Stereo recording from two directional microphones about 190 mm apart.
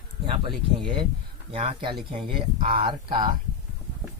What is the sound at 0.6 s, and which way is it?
Speech, 30° right (ahead or behind).